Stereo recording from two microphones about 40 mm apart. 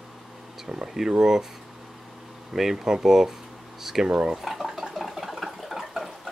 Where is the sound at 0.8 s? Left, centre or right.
Centre.